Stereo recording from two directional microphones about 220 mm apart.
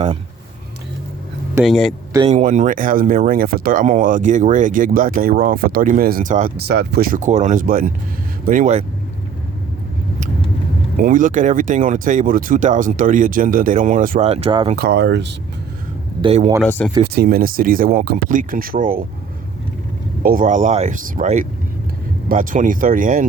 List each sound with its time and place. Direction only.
1.6 s speech: centre (ahead or behind)
2.3 s speech: 35° right (ahead or behind)
11.0 s speech: 35° right (ahead or behind)
14.8 s speech: 45° right (ahead or behind)
16.2 s speech: 30° right (ahead or behind)
16.6 s speech: 10° left (ahead or behind)
17.2 s speech: 40° right (ahead or behind)
20.2 s speech: 40° right (ahead or behind)